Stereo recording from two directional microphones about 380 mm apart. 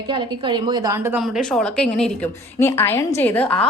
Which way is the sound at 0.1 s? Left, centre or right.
Centre.